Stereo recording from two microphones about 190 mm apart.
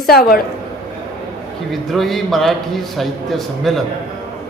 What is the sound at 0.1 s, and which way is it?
Speech, 50° left (ahead or behind).